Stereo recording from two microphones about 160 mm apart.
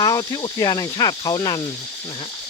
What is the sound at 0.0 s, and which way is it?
Speech, 25° left (ahead or behind).